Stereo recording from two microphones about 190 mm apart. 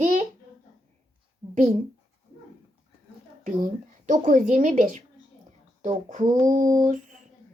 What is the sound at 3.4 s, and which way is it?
A woman's voice, 40° right (ahead or behind).